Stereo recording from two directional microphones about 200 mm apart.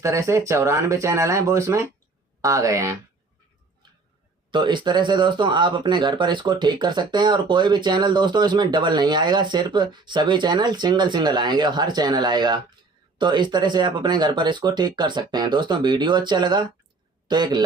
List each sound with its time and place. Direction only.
0.0 s speech: 15° right (ahead or behind)
4.5 s a man's voice: 25° right (ahead or behind)